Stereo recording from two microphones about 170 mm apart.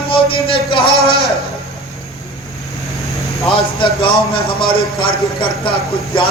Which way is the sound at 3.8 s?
30° left (ahead or behind).